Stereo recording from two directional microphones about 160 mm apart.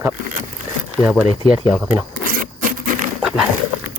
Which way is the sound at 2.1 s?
60° right (ahead or behind).